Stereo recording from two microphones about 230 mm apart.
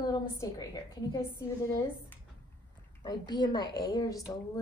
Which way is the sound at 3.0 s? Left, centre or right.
Centre.